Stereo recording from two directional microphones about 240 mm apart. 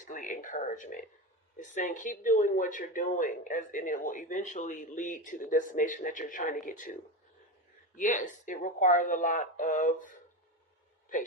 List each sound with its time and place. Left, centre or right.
0.0 s speech: left